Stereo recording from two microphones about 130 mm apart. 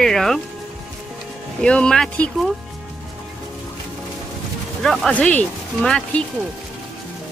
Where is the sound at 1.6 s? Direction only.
5° left (ahead or behind).